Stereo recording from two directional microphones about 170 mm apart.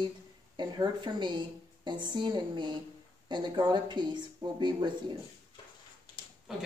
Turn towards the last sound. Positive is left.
turn(degrees=-5)  # may be behind; listen again after turning